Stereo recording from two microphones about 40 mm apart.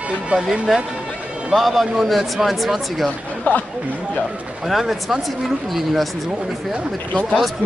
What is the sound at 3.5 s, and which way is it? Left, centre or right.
Speech, left.